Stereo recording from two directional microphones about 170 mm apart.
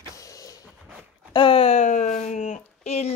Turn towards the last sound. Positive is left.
turn(degrees=40)  # may be behind; listen again after turning